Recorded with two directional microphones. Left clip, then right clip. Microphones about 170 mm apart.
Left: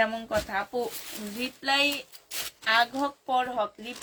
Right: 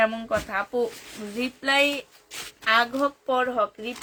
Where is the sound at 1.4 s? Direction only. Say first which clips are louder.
Right 4 dB; 45° right (ahead or behind).